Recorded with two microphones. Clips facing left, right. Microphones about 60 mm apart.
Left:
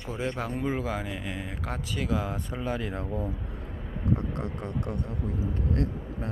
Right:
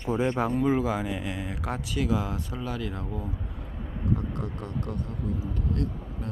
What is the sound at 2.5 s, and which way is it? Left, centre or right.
Speech, left.